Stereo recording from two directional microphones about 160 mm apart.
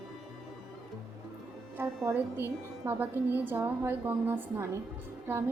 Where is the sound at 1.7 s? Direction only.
15° right (ahead or behind).